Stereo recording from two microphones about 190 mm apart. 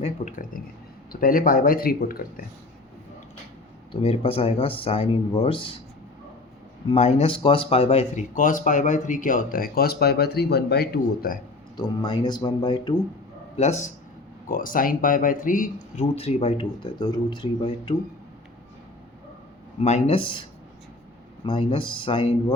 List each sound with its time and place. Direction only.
0.0 s a sound: 40° left (ahead or behind)
1.1 s speech: 45° left (ahead or behind)
4.0 s speech: 30° left (ahead or behind)
6.8 s speech: 35° left (ahead or behind); by 11.3 s 55° left (ahead or behind)
11.8 s speech: 25° left (ahead or behind)
13.6 s speech: 35° left (ahead or behind)
19.8 s speech: 35° left (ahead or behind)
21.4 s speech: 30° left (ahead or behind)